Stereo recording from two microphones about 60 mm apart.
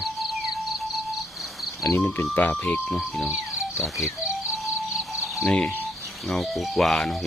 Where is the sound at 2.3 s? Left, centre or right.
Left.